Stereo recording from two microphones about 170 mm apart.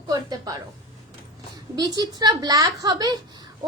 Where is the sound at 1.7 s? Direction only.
25° right (ahead or behind).